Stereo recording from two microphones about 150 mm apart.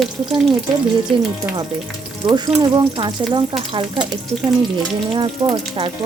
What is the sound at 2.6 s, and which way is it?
Speech, 30° right (ahead or behind).